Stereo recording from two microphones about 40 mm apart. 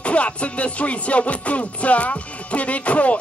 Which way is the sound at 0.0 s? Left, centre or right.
Left.